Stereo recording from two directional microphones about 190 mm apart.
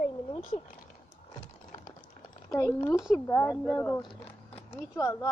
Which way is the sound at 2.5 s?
15° left (ahead or behind).